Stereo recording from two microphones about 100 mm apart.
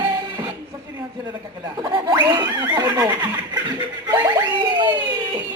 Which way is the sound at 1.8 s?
45° right (ahead or behind).